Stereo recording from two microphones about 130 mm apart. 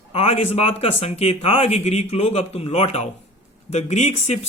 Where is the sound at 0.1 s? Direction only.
50° left (ahead or behind).